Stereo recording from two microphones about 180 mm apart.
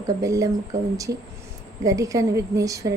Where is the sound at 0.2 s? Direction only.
20° right (ahead or behind).